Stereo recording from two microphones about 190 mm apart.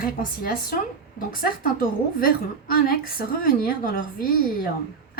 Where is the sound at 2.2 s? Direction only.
50° left (ahead or behind).